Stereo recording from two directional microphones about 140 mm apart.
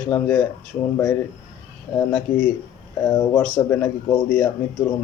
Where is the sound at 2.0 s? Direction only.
15° left (ahead or behind).